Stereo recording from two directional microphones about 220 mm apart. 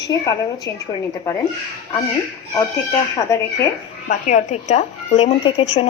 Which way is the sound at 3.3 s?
15° left (ahead or behind).